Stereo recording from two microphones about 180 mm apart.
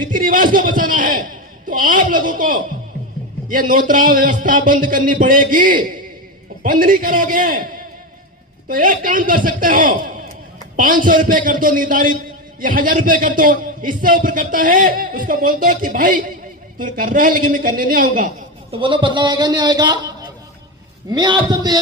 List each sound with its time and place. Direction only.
0.1 s speech: 50° right (ahead or behind)
8.7 s speech: 50° right (ahead or behind)
18.7 s speech: 25° right (ahead or behind)